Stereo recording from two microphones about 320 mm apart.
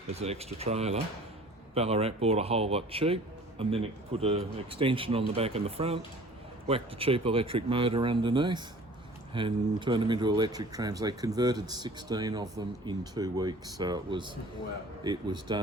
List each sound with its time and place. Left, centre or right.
0.1 s speech: centre